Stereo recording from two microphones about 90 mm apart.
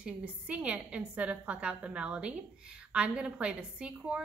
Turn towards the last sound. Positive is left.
turn(degrees=-10)  # may be behind; listen again after turning